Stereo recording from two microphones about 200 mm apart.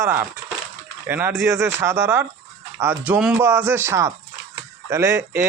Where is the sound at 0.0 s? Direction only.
10° right (ahead or behind).